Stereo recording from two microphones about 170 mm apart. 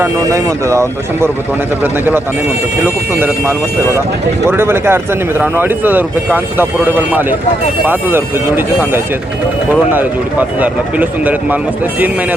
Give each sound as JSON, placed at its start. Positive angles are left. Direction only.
{"t": 0.0, "sound": "speech", "side_deg": -20}
{"t": 10.6, "sound": "speech", "side_deg": -10}